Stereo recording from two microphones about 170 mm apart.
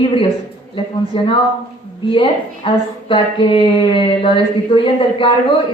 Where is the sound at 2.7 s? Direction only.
30° left (ahead or behind).